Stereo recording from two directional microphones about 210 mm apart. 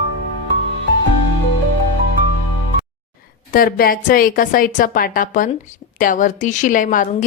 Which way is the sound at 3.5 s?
45° left (ahead or behind).